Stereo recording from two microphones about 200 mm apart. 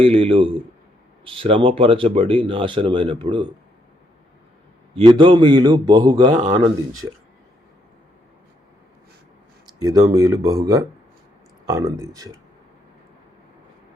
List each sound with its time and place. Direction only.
0.0 s speech: 25° right (ahead or behind)
4.9 s speech: 25° right (ahead or behind)
9.8 s speech: 20° right (ahead or behind)